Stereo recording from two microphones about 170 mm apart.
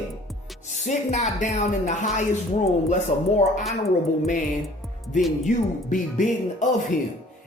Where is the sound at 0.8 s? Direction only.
45° left (ahead or behind).